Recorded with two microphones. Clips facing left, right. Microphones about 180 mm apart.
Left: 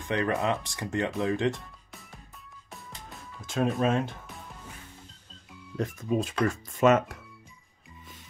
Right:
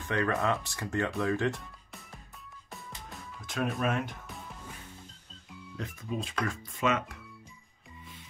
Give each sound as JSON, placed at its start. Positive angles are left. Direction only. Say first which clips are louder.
{"t": 0.1, "sound": "speech", "louder": "left 2 dB", "side_deg": 20}
{"t": 3.3, "sound": "speech", "louder": "left 5 dB", "side_deg": 25}
{"t": 5.8, "sound": "speech", "louder": "left 8 dB", "side_deg": 45}